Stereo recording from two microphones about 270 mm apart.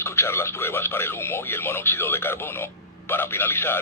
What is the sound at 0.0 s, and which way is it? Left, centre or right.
Speech, centre.